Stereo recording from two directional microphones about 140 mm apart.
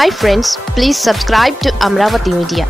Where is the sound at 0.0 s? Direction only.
Centre (ahead or behind).